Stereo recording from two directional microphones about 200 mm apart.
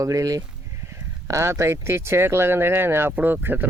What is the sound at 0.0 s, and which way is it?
Speech, 15° right (ahead or behind).